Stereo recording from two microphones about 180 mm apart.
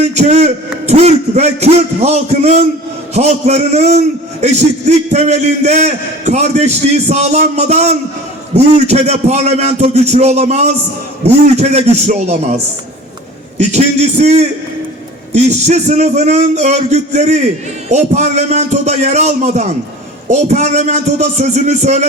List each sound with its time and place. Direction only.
0.1 s a man's voice: 40° right (ahead or behind)
13.6 s a man's voice: 40° right (ahead or behind)